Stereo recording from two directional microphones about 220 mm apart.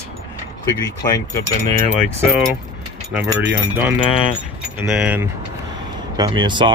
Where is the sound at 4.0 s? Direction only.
25° left (ahead or behind).